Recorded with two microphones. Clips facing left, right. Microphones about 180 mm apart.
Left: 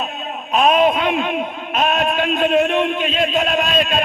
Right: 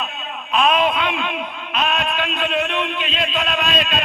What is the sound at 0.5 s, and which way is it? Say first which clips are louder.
A man's voice: left 3 dB; 45° left (ahead or behind).